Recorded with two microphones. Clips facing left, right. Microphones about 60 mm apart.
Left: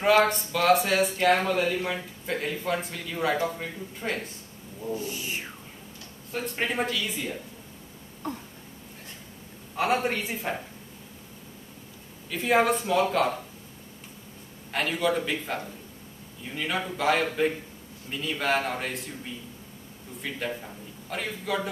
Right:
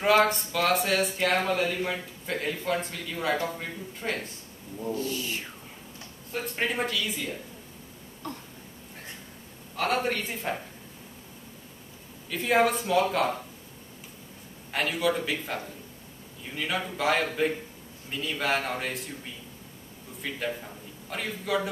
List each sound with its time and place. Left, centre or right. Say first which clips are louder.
0.0 s speech: left 1 dB; centre
4.9 s speech: right 1 dB; centre
6.3 s speech: left 1 dB; centre
8.2 s speech: left 4 dB; centre
9.8 s a man's voice: left 2 dB; centre
12.3 s speech: left 1 dB; centre
14.7 s speech: left 1 dB; centre
20.2 s a man's voice: even; centre